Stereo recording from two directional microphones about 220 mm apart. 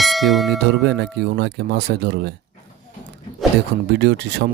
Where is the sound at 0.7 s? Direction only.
50° right (ahead or behind).